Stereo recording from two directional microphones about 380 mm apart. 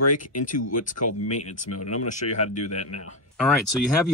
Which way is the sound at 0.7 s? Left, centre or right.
Left.